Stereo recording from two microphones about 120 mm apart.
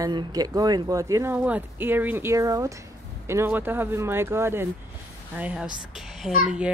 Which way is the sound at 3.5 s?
15° right (ahead or behind).